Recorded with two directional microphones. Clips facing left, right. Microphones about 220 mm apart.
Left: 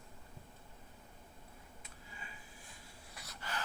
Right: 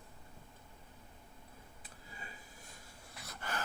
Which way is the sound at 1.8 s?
40° right (ahead or behind).